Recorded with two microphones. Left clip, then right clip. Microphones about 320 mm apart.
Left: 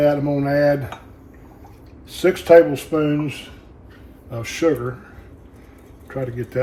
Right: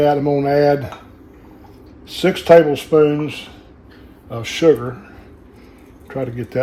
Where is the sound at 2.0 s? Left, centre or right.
Right.